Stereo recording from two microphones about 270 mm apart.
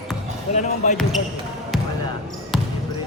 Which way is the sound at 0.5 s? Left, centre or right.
Left.